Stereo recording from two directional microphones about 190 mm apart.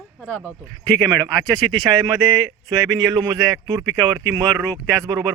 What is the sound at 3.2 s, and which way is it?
Speech, 15° right (ahead or behind).